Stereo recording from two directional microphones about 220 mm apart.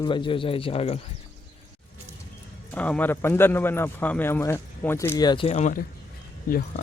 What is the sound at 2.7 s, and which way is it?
Speech, 5° left (ahead or behind).